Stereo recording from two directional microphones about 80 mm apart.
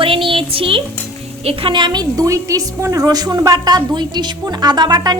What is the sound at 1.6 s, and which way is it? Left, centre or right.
Speech, right.